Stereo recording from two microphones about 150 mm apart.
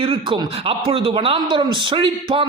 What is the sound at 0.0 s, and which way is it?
A man's voice, 35° right (ahead or behind).